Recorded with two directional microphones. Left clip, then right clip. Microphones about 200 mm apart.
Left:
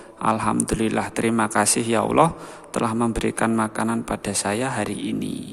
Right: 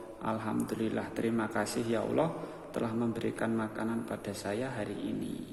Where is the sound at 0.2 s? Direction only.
35° left (ahead or behind).